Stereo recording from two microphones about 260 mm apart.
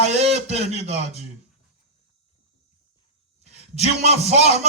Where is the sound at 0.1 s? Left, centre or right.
Right.